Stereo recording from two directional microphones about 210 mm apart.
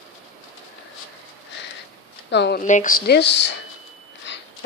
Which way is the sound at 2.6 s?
35° left (ahead or behind).